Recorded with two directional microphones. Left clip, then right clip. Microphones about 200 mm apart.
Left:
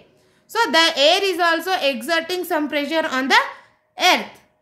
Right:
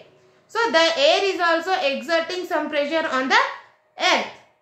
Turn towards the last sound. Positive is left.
turn(degrees=55)  # may be behind; listen again after turning